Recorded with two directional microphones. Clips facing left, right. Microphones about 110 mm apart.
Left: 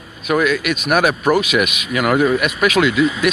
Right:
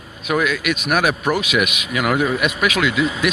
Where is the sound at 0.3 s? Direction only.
10° right (ahead or behind).